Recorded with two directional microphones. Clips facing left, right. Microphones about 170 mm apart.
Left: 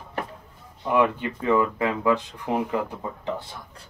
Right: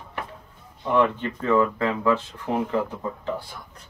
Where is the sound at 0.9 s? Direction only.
10° left (ahead or behind).